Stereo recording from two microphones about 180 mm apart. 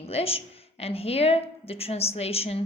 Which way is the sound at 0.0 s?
35° left (ahead or behind).